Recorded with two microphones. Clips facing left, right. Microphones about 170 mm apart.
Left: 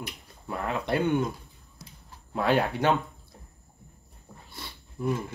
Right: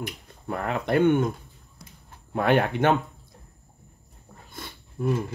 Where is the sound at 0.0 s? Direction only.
55° right (ahead or behind).